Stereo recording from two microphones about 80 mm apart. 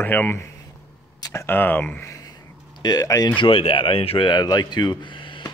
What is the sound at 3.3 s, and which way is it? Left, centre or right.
Speech, left.